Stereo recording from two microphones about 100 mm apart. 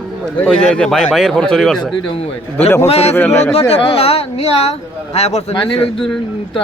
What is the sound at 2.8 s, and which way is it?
Speech, 90° left.